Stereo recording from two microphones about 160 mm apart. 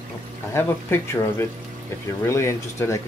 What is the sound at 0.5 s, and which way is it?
Speech, 15° left (ahead or behind).